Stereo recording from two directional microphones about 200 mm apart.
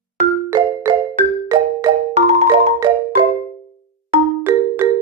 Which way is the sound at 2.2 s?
30° right (ahead or behind).